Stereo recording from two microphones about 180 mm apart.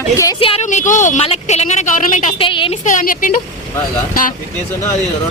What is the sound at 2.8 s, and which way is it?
Speech, 45° left (ahead or behind).